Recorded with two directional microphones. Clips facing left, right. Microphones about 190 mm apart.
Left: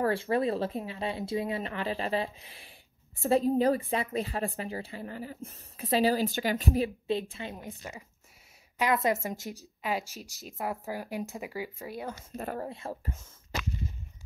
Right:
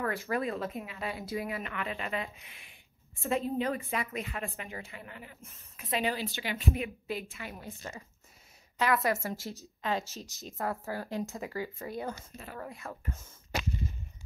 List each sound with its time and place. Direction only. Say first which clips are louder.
0.0 s speech: left 5 dB; 30° left (ahead or behind)
6.2 s speech: left 5 dB; 45° left (ahead or behind); by 12.2 s 5° left (ahead or behind)
12.5 s speech: left 5 dB; 30° left (ahead or behind)